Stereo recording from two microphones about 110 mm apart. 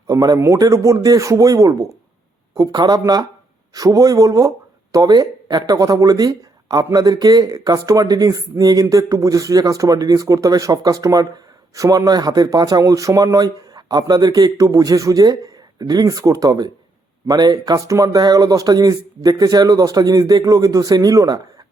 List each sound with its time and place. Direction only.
0.1 s speech: 30° right (ahead or behind)